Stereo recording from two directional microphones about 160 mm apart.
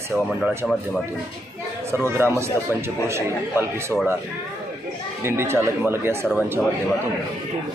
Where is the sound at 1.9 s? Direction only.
15° right (ahead or behind).